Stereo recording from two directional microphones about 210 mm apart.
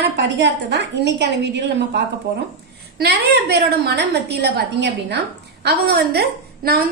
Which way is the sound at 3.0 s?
50° right (ahead or behind).